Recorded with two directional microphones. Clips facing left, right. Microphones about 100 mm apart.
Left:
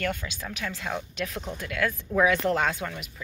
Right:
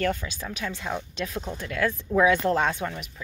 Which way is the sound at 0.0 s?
30° right (ahead or behind).